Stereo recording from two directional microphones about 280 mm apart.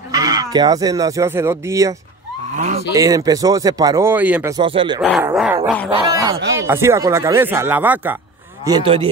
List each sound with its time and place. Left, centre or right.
0.1 s speech: centre
2.5 s speech: right
2.9 s speech: centre
5.0 s speech: centre
8.6 s speech: centre